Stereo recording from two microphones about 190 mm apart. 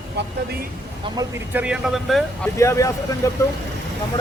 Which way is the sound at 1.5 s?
5° right (ahead or behind).